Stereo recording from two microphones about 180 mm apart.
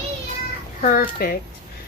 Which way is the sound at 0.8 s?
50° left (ahead or behind).